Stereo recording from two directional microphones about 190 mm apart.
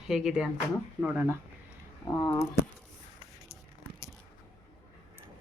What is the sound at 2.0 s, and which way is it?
Speech, 15° left (ahead or behind).